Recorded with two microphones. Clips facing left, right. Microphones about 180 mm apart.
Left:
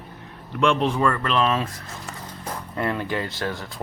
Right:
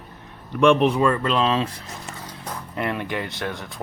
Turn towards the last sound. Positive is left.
turn(degrees=-20)  # may be behind; listen again after turning